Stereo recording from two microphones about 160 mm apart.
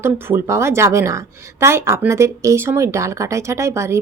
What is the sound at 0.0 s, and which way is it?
A woman's voice, 15° right (ahead or behind).